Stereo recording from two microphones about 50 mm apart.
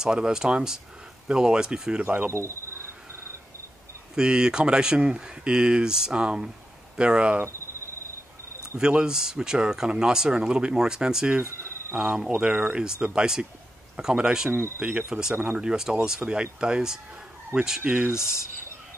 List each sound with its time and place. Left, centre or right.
0.0 s speech: centre; by 2.3 s right
4.1 s speech: centre
8.7 s speech: centre
14.8 s speech: right
15.3 s speech: right
15.6 s speech: centre
17.5 s speech: right
17.8 s speech: right